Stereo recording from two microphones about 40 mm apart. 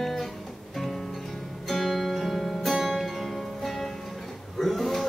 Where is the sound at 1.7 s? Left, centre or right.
Centre.